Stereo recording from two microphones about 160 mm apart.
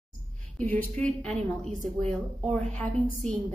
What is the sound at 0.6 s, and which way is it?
A woman's voice, 10° left (ahead or behind).